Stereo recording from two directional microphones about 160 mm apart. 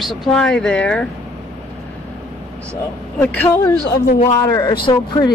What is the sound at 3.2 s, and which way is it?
Speech, 10° left (ahead or behind).